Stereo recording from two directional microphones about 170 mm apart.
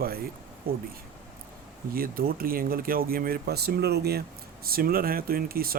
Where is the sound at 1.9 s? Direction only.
60° right (ahead or behind).